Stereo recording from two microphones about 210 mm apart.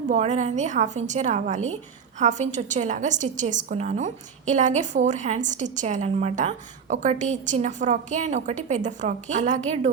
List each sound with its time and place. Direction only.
0.1 s a woman's voice: 35° right (ahead or behind)